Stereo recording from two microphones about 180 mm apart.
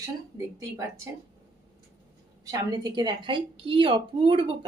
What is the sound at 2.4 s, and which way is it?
A woman's voice, 20° right (ahead or behind).